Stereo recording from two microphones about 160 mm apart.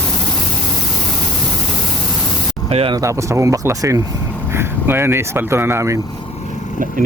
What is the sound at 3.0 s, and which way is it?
Speech, 20° right (ahead or behind).